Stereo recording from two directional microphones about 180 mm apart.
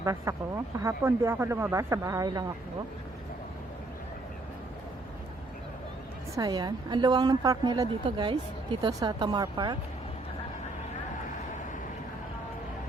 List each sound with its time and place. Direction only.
0.0 s a woman's voice: 20° right (ahead or behind)
6.3 s a woman's voice: 20° right (ahead or behind)